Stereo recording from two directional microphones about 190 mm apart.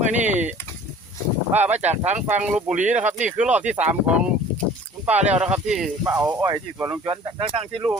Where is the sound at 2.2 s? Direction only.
5° right (ahead or behind).